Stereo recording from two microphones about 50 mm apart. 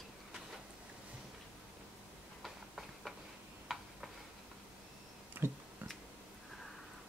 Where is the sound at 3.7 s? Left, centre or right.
Centre.